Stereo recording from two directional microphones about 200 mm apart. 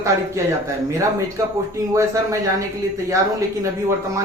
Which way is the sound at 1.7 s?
15° right (ahead or behind).